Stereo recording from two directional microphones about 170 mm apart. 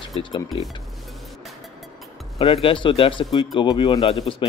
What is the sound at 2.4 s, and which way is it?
Speech, 30° left (ahead or behind).